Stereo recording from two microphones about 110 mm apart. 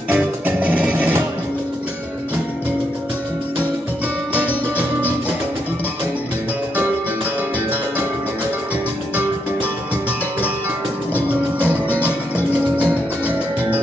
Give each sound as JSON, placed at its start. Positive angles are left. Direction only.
{"t": 0.1, "sound": "music", "side_deg": -15}
{"t": 4.3, "sound": "music", "side_deg": 20}